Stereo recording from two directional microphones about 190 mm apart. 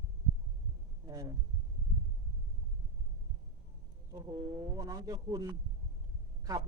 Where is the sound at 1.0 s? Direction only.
20° right (ahead or behind).